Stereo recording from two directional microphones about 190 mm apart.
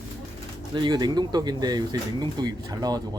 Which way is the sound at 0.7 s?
25° right (ahead or behind).